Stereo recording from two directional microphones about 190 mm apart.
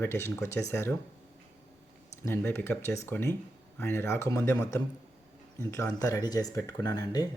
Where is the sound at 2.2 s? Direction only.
10° left (ahead or behind).